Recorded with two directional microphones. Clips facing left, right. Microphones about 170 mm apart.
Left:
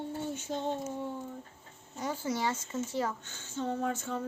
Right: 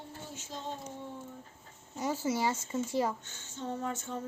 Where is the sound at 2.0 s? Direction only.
10° right (ahead or behind).